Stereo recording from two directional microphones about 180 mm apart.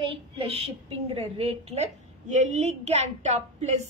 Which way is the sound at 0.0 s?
30° right (ahead or behind).